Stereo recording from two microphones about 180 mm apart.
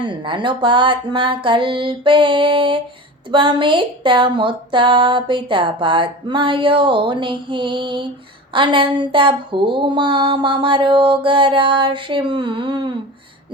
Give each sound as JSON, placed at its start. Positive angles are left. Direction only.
{"t": 0.0, "sound": "speech", "side_deg": -25}